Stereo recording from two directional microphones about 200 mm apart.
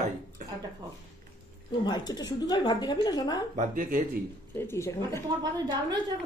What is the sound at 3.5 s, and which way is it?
Speech, 40° right (ahead or behind).